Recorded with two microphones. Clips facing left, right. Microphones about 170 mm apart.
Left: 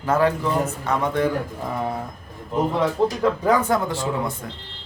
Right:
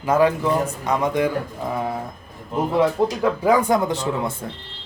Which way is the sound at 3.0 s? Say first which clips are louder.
Even; 15° right (ahead or behind).